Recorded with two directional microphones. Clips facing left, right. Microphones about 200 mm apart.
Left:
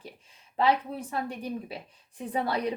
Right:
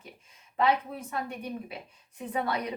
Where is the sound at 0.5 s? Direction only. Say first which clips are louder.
Left 1 dB; 30° left (ahead or behind).